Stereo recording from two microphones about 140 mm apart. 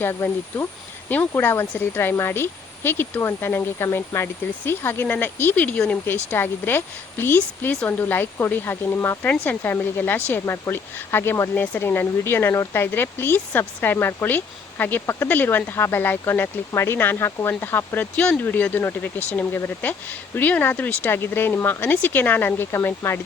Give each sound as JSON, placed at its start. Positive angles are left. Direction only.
{"t": 0.0, "sound": "speech", "side_deg": 15}